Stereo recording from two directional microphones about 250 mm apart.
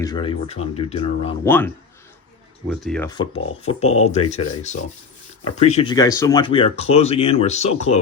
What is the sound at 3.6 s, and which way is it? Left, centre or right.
Speech, left.